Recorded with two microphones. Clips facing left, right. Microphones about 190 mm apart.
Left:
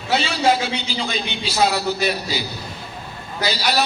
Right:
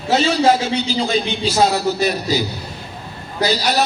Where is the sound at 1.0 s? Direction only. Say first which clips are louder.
Right 7 dB; 45° right (ahead or behind).